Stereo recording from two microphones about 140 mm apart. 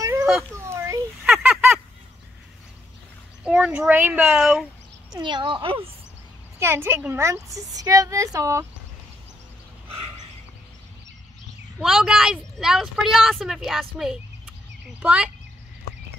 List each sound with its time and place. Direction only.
0.0 s a sound: 20° right (ahead or behind)
1.2 s honk: 5° right (ahead or behind)
3.4 s speech: 10° right (ahead or behind)
5.1 s speech: 35° right (ahead or behind)
6.6 s speech: 15° right (ahead or behind)
11.8 s a woman's voice: 5° right (ahead or behind)